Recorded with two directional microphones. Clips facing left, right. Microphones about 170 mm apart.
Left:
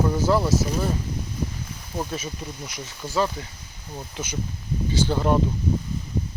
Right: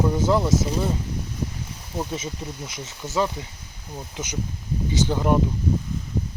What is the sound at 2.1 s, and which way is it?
Speech, 20° right (ahead or behind).